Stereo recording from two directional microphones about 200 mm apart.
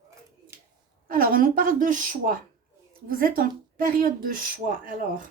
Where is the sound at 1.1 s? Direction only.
45° right (ahead or behind).